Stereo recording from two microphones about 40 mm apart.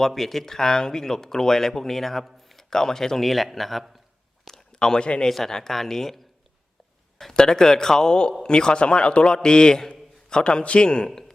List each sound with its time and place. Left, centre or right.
0.0 s a man's voice: centre
4.7 s a sound: centre
5.3 s speech: centre
7.3 s a man's voice: centre